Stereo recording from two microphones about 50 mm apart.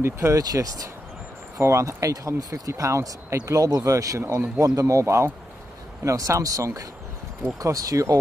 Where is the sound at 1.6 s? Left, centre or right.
Right.